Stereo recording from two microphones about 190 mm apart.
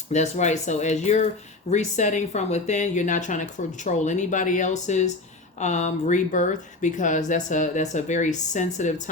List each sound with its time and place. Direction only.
0.1 s speech: 40° left (ahead or behind)